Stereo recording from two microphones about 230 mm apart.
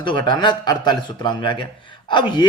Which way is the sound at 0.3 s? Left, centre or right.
Centre.